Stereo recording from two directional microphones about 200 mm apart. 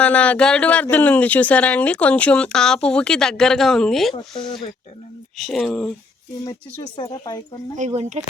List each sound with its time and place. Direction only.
0.0 s speech: 5° left (ahead or behind)
4.1 s speech: 25° left (ahead or behind)
5.4 s speech: centre (ahead or behind)
6.4 s speech: 20° left (ahead or behind)
7.8 s speech: 35° right (ahead or behind)